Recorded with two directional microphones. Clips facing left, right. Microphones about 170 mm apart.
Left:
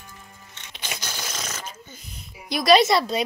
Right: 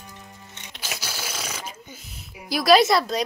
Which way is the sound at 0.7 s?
5° right (ahead or behind).